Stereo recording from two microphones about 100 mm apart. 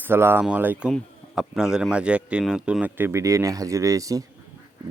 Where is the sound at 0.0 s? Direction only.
25° right (ahead or behind).